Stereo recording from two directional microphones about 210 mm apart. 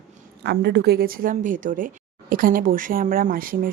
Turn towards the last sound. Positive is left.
turn(degrees=-40)  # may be behind; listen again after turning